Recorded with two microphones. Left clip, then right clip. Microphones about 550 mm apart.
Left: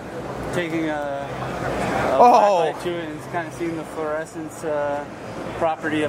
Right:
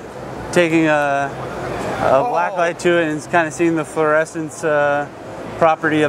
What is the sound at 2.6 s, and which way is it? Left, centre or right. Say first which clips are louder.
Speech: right 8 dB; right.